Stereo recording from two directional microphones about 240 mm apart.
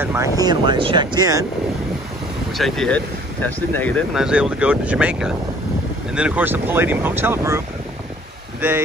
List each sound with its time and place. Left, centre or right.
0.0 s speech: centre
2.5 s speech: centre